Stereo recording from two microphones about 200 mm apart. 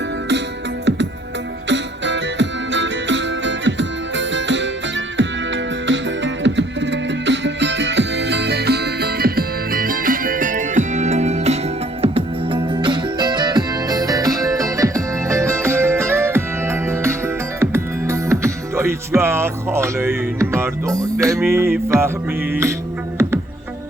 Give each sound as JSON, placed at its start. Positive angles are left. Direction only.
{"t": 1.7, "sound": "music", "side_deg": -65}
{"t": 5.9, "sound": "music", "side_deg": -65}